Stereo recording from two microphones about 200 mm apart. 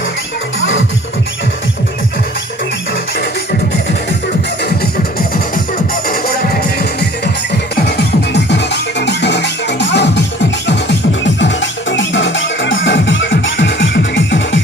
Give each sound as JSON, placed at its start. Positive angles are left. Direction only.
{"t": 0.6, "sound": "music", "side_deg": 70}
{"t": 5.9, "sound": "music", "side_deg": 50}
{"t": 11.3, "sound": "music", "side_deg": 65}